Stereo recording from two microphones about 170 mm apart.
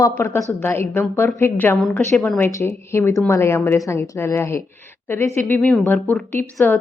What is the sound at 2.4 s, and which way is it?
A woman's voice, 15° left (ahead or behind).